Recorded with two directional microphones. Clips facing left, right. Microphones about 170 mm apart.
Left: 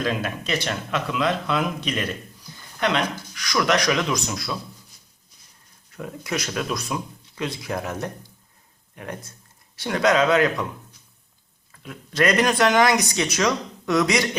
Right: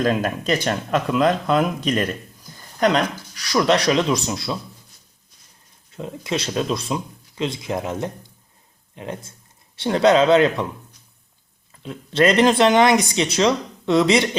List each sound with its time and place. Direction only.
0.0 s speech: 45° right (ahead or behind); by 4.5 s 25° right (ahead or behind)
5.9 s speech: 25° right (ahead or behind)
11.7 s speech: 25° right (ahead or behind)